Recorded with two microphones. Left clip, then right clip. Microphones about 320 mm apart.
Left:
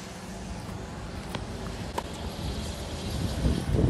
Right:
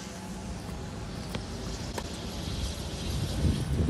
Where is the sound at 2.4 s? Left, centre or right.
Left.